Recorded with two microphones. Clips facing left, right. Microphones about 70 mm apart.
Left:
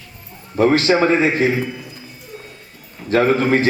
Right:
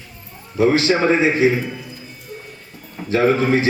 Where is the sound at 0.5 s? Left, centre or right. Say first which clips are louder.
Left 2 dB; left.